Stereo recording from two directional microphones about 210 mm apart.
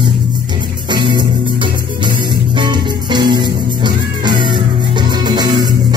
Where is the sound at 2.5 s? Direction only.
20° right (ahead or behind).